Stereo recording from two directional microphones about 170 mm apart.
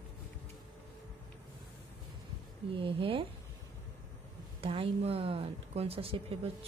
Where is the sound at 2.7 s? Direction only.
30° right (ahead or behind).